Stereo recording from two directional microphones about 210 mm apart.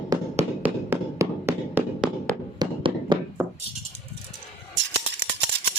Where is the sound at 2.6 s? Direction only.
20° right (ahead or behind).